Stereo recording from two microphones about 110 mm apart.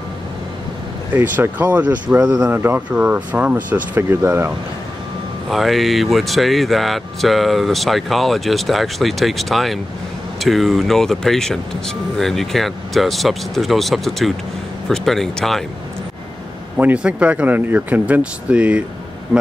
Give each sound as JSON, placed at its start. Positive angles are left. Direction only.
{"t": 1.1, "sound": "speech", "side_deg": -15}
{"t": 2.5, "sound": "speech", "side_deg": -20}
{"t": 5.5, "sound": "speech", "side_deg": 0}
{"t": 16.7, "sound": "speech", "side_deg": -10}